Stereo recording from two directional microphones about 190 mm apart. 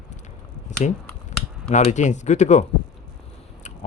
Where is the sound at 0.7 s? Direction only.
40° left (ahead or behind).